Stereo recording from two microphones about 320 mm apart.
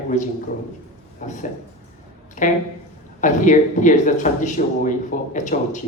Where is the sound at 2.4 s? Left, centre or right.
Left.